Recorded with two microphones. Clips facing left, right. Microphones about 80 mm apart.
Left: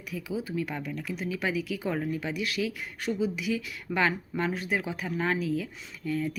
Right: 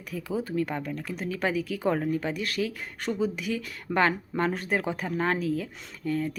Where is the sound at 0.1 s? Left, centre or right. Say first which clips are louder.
Right 3 dB; right.